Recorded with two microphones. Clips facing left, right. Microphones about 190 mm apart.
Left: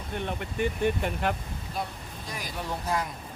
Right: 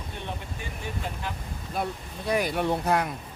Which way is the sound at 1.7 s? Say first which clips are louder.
Right 5 dB; 60° right (ahead or behind).